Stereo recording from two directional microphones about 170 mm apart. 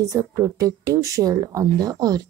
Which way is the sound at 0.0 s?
20° right (ahead or behind).